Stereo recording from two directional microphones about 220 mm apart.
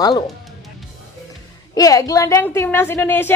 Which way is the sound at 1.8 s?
15° left (ahead or behind).